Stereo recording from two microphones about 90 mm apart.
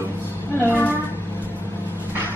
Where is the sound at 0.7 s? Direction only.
20° left (ahead or behind).